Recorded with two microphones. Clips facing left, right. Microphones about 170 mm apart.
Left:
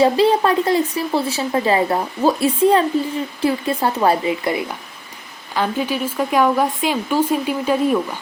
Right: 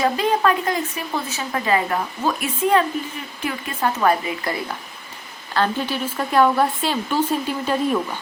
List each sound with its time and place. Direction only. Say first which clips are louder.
0.0 s speech: left 5 dB; 30° left (ahead or behind)
5.5 s speech: left 1 dB; 10° left (ahead or behind)